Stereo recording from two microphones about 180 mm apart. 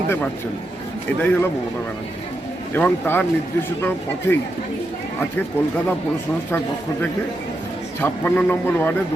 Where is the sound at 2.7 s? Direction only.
10° left (ahead or behind).